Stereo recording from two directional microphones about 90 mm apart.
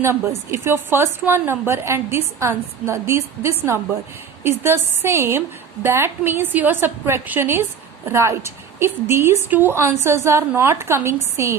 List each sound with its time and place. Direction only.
0.0 s a woman's voice: 30° right (ahead or behind)